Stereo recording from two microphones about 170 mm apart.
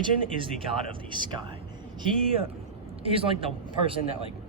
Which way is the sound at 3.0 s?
35° right (ahead or behind).